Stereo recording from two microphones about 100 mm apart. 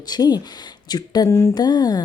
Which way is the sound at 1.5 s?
45° left (ahead or behind).